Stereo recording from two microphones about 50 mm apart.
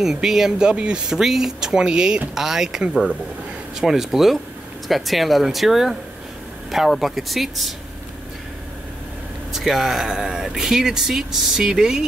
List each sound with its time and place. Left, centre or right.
0.0 s speech: centre
9.5 s speech: centre